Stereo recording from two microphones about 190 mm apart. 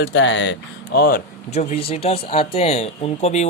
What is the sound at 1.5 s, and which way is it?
Speech, 35° left (ahead or behind).